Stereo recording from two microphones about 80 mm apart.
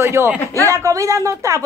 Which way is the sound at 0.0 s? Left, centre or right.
Right.